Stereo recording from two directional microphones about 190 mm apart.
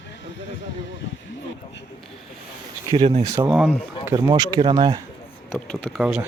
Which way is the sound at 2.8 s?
25° right (ahead or behind).